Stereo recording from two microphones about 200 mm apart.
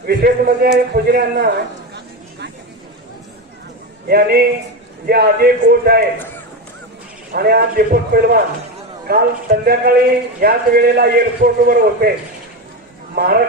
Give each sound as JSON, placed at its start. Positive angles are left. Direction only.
{"t": 0.1, "sound": "a man's voice", "side_deg": -50}
{"t": 4.1, "sound": "a man's voice", "side_deg": -50}
{"t": 7.3, "sound": "a man's voice", "side_deg": -50}
{"t": 13.2, "sound": "a man's voice", "side_deg": -50}